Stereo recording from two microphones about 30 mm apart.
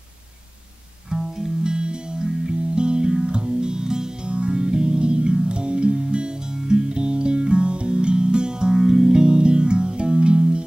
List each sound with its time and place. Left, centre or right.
1.1 s music: right
4.3 s music: right